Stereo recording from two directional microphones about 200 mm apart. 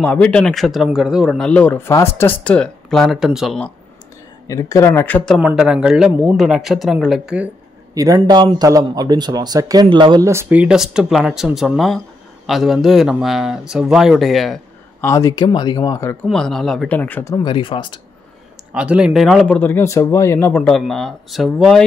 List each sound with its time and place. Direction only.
0.0 s speech: 5° left (ahead or behind)
4.5 s speech: 15° left (ahead or behind); by 7.4 s 5° right (ahead or behind)
7.9 s speech: 15° right (ahead or behind); by 15.0 s centre (ahead or behind)
15.0 s speech: 15° left (ahead or behind)
16.3 s speech: centre (ahead or behind); by 18.0 s 25° left (ahead or behind)
18.7 s speech: 5° right (ahead or behind)